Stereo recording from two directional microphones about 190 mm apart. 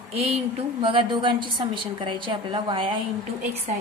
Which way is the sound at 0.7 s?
25° right (ahead or behind).